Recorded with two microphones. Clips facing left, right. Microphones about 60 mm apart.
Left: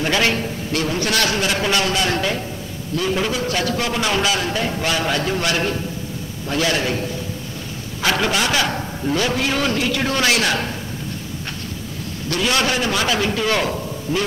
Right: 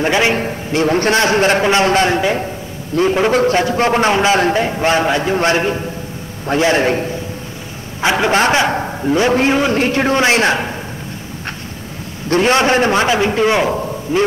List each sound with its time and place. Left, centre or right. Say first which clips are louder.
0.0 s a man's voice: right 5 dB; right
0.8 s a man's voice: right 8 dB; right
8.0 s a man's voice: right 5 dB; right
8.3 s a man's voice: right 6 dB; right
12.3 s a man's voice: right 7 dB; right